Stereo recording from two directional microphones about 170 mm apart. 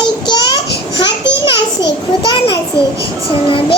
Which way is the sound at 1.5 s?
30° left (ahead or behind).